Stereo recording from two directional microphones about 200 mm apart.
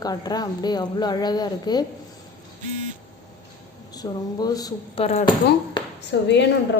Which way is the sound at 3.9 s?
20° left (ahead or behind).